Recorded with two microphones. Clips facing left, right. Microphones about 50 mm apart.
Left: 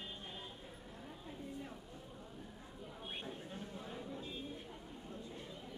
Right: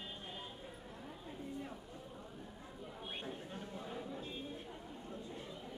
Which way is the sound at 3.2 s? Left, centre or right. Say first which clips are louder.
Right 1 dB; centre.